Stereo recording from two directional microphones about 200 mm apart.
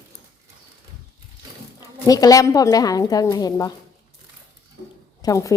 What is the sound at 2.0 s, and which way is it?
A woman's voice, 20° left (ahead or behind).